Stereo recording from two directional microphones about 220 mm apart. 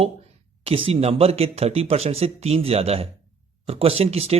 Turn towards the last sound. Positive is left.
turn(degrees=-30)  # may be behind; listen again after turning